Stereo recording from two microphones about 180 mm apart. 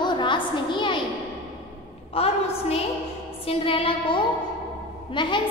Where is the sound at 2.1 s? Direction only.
35° left (ahead or behind).